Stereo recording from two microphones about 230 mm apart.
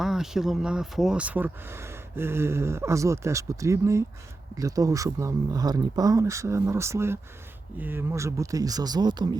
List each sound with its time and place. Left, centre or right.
0.0 s speech: centre